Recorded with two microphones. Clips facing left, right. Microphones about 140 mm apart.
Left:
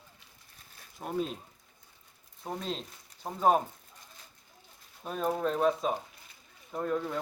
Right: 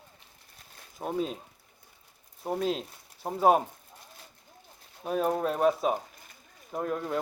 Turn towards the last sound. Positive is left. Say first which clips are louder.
# right 1 dB
turn(degrees=-10)  # may be behind; listen again after turning